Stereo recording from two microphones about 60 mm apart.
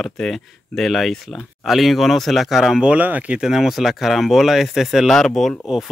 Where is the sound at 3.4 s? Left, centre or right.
Centre.